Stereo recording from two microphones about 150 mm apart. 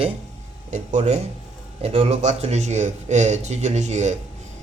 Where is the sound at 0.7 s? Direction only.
50° right (ahead or behind).